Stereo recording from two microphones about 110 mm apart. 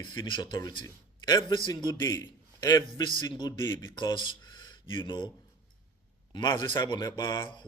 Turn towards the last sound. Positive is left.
turn(degrees=45)  # may be behind; listen again after turning